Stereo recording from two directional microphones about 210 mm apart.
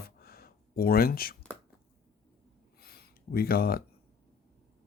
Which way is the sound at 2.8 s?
50° left (ahead or behind).